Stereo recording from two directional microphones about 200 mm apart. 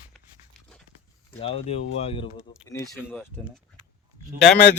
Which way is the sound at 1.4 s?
30° left (ahead or behind).